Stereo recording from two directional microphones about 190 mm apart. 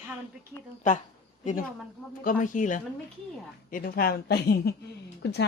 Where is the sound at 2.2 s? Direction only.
45° left (ahead or behind).